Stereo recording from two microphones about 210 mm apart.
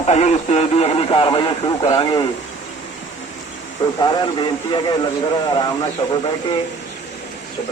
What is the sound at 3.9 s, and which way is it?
Speech, 20° left (ahead or behind).